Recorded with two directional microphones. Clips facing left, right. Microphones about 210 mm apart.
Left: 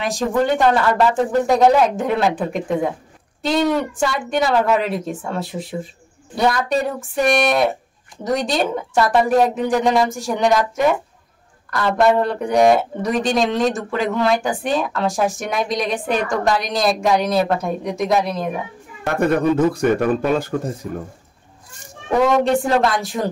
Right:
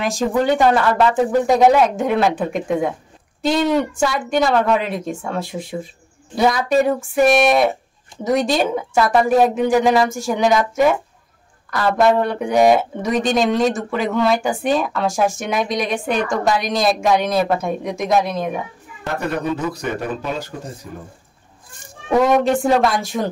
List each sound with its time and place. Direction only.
0.0 s speech: centre (ahead or behind)
19.1 s speech: 50° left (ahead or behind)
22.4 s speech: centre (ahead or behind)